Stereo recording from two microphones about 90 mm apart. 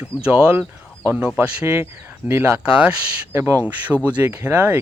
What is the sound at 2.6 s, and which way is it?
Speech, 10° right (ahead or behind).